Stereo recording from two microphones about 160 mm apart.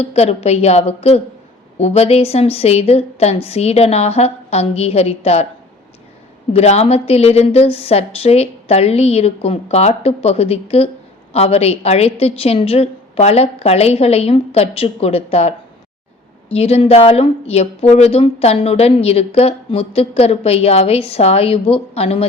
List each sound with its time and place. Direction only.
0.0 s speech: 40° left (ahead or behind)
6.5 s speech: 40° left (ahead or behind)